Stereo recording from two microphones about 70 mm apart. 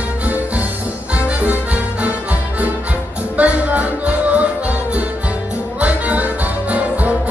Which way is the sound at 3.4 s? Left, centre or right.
Right.